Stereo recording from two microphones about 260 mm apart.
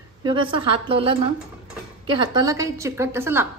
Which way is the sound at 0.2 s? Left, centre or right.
Centre.